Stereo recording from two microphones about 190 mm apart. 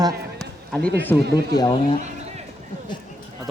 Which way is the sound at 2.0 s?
35° right (ahead or behind).